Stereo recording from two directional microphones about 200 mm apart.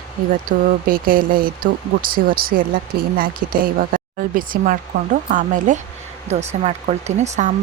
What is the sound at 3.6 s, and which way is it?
Speech, 45° right (ahead or behind).